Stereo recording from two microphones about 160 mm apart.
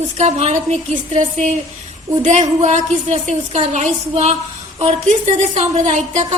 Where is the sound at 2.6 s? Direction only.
45° right (ahead or behind).